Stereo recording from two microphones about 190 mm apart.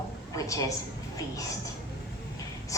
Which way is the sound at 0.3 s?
15° left (ahead or behind).